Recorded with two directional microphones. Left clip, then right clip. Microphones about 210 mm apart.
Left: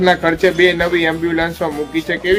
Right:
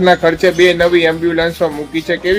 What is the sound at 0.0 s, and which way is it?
Speech, 45° right (ahead or behind).